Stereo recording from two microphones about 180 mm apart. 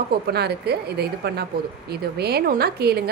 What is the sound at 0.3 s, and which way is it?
A woman's voice, 65° right (ahead or behind).